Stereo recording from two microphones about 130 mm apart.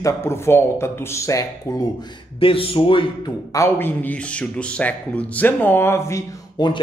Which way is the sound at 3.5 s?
20° left (ahead or behind).